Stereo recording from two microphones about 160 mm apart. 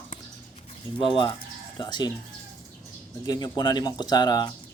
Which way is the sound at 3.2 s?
25° left (ahead or behind).